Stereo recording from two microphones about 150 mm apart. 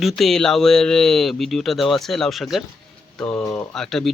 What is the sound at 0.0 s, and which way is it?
Speech, centre (ahead or behind).